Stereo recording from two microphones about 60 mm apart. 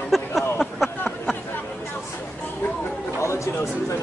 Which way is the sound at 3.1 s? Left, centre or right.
Left.